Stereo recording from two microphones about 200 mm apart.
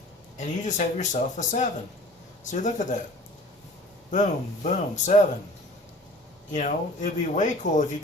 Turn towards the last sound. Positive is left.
turn(degrees=40)  # may be behind; listen again after turning